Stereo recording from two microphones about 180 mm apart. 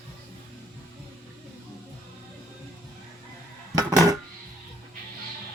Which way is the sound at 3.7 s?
20° right (ahead or behind).